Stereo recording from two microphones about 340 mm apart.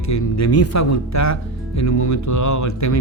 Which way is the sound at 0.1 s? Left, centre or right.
Left.